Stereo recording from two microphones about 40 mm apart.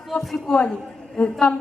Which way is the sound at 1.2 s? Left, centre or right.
Left.